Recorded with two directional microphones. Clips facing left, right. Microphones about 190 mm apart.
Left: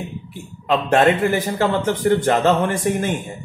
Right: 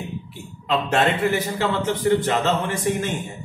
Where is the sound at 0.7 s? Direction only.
50° left (ahead or behind).